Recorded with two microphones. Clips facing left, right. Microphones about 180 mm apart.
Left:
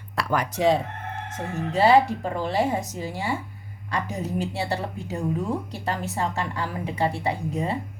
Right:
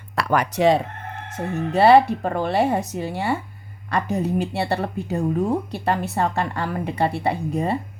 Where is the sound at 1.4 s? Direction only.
60° right (ahead or behind).